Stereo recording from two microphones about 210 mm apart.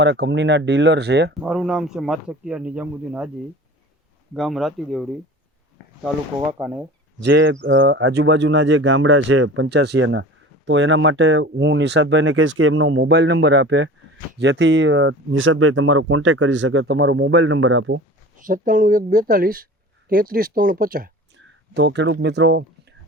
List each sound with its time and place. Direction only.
0.0 s speech: 55° right (ahead or behind)
1.5 s a man's voice: centre (ahead or behind)
4.4 s a man's voice: centre (ahead or behind)
6.6 s a man's voice: 5° right (ahead or behind)
7.2 s speech: 55° right (ahead or behind)
18.3 s speech: 40° right (ahead or behind)
21.3 s a sound: 55° right (ahead or behind)